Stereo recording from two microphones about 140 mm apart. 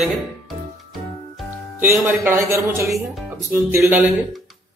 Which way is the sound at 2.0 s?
15° right (ahead or behind).